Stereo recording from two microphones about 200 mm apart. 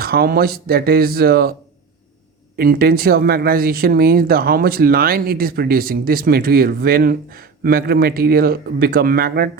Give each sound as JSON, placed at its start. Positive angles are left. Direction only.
{"t": 0.0, "sound": "speech", "side_deg": -50}
{"t": 2.6, "sound": "speech", "side_deg": -50}